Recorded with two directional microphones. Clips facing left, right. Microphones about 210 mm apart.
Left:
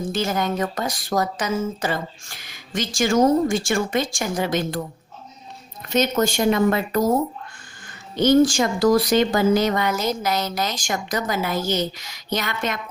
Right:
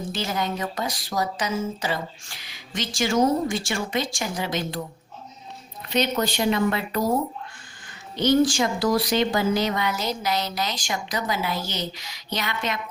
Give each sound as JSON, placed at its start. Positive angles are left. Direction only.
{"t": 0.1, "sound": "speech", "side_deg": 45}
{"t": 5.9, "sound": "speech", "side_deg": 45}
{"t": 8.1, "sound": "speech", "side_deg": 50}